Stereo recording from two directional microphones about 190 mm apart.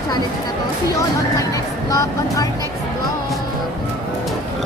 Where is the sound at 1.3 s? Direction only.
15° left (ahead or behind).